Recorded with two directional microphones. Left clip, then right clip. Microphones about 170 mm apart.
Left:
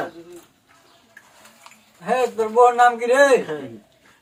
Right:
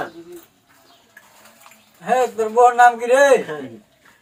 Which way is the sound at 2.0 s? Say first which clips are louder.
Right 2 dB; centre (ahead or behind).